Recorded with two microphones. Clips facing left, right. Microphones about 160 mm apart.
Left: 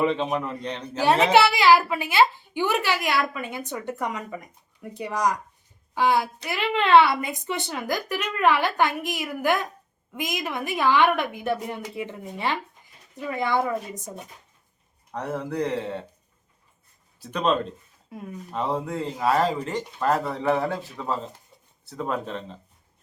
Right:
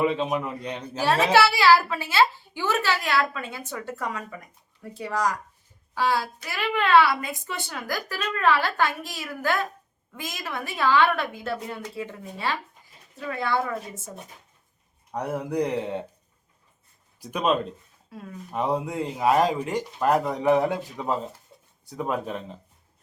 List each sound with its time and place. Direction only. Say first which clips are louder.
0.0 s speech: even; 5° right (ahead or behind)
1.0 s a woman's voice: left 2 dB; 20° left (ahead or behind)
15.1 s speech: right 2 dB; 10° right (ahead or behind)
17.2 s speech: even; 10° right (ahead or behind)
18.1 s a woman's voice: left 3 dB; 20° left (ahead or behind)
18.5 s speech: right 1 dB; 15° right (ahead or behind)